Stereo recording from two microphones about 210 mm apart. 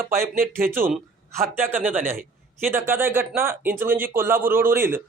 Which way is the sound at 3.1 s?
10° right (ahead or behind).